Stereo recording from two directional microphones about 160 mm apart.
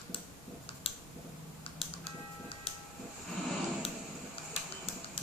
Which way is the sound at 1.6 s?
35° left (ahead or behind).